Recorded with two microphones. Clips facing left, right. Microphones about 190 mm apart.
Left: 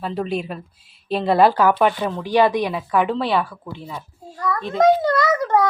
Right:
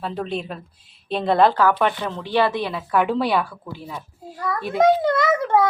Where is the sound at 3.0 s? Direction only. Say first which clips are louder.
Even; 5° right (ahead or behind).